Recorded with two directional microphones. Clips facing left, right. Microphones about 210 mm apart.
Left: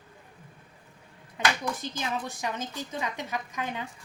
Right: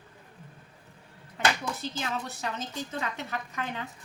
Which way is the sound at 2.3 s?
15° left (ahead or behind).